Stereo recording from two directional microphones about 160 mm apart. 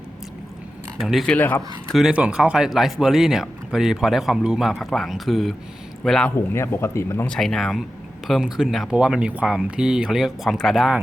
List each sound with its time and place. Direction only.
0.9 s speech: centre (ahead or behind)
1.4 s speech: 10° left (ahead or behind)
1.9 s speech: centre (ahead or behind)
6.3 s speech: 15° left (ahead or behind)
7.3 s speech: centre (ahead or behind)